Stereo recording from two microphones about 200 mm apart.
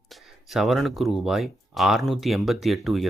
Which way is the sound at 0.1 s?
Centre (ahead or behind).